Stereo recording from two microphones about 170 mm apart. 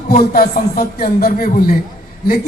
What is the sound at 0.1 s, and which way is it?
Speech, 60° left (ahead or behind).